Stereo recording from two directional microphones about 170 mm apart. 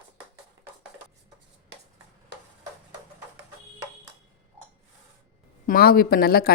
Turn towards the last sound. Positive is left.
turn(degrees=65)  # may be behind; listen again after turning